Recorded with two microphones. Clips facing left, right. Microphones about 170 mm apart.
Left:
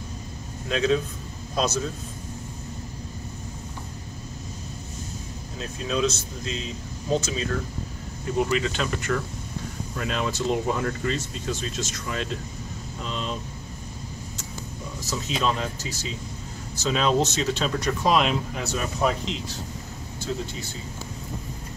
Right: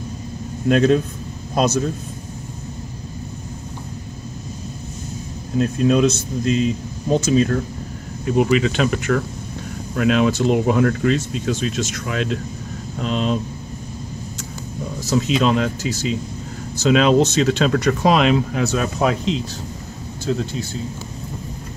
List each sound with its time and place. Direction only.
0.7 s a man's voice: 55° right (ahead or behind)
5.6 s speech: 55° right (ahead or behind); by 13.4 s 75° right (ahead or behind)
15.1 s speech: 75° right (ahead or behind)